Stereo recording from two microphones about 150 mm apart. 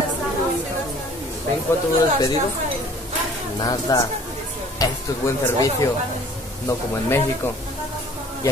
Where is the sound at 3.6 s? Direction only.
25° left (ahead or behind).